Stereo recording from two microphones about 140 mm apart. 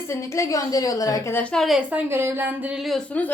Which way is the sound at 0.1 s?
20° left (ahead or behind).